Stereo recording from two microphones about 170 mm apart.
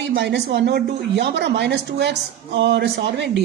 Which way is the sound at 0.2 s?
90° right.